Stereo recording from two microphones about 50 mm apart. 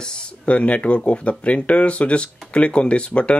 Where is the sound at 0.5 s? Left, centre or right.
Left.